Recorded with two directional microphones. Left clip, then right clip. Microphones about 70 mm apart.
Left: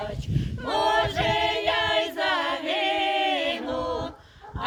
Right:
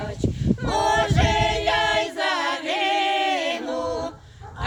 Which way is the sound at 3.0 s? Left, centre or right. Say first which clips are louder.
Right 2 dB; right.